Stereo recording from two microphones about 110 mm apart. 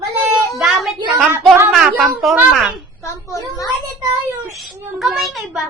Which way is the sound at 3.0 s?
30° left (ahead or behind).